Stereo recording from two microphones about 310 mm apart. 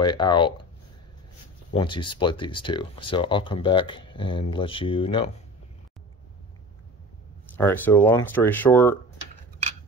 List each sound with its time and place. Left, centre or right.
0.0 s speech: centre
1.7 s speech: centre
7.4 s speech: centre